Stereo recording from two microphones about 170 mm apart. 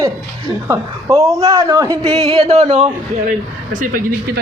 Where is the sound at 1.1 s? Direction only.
15° right (ahead or behind).